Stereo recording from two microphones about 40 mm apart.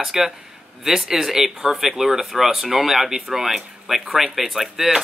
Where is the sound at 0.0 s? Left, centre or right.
Centre.